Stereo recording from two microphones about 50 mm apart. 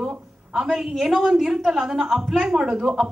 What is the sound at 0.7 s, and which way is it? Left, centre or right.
A woman's voice, centre.